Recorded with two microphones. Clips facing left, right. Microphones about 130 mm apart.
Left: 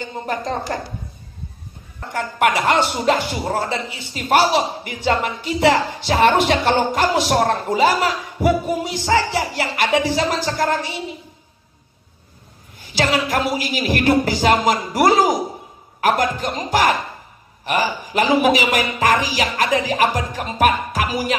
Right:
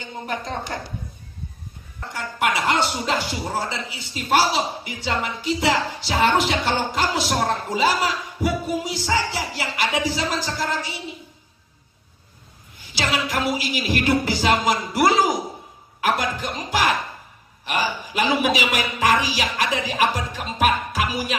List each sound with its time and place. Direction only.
0.3 s a woman's voice: 40° left (ahead or behind)
2.1 s speech: 50° left (ahead or behind)
12.9 s speech: 45° left (ahead or behind)